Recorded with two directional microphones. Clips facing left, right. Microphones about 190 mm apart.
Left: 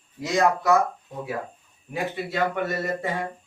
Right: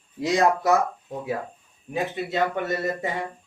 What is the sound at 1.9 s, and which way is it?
Speech, 20° right (ahead or behind).